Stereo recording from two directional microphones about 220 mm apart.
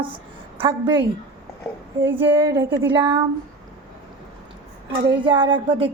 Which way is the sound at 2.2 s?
20° right (ahead or behind).